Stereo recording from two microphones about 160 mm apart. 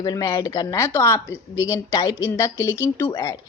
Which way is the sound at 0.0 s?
25° left (ahead or behind).